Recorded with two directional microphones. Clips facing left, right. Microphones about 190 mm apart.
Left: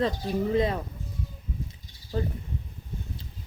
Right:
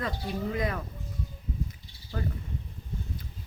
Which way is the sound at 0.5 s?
25° left (ahead or behind).